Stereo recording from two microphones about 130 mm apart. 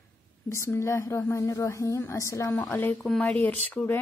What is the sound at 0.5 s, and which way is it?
A woman's voice, 20° left (ahead or behind).